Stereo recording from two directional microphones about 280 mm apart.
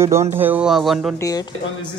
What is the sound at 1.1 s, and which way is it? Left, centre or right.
Speech, centre.